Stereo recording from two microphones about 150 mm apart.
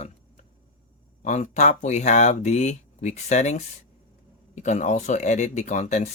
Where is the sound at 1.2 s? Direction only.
55° left (ahead or behind).